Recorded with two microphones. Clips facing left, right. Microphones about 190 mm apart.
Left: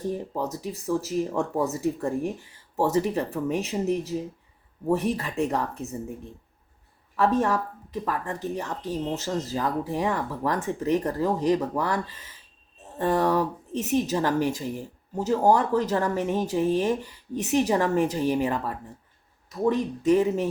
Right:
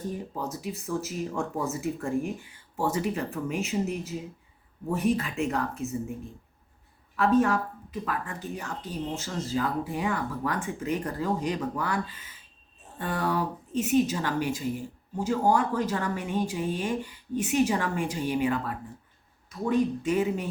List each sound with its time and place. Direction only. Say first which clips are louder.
0.1 s speech: left 4 dB; 40° left (ahead or behind)
7.2 s speech: even; 40° left (ahead or behind)